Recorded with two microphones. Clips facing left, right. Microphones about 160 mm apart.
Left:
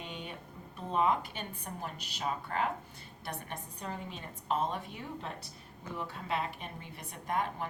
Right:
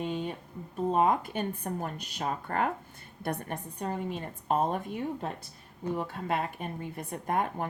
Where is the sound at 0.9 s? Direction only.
45° right (ahead or behind).